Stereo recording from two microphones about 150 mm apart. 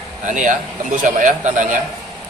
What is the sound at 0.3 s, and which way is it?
A man's voice, 60° right (ahead or behind).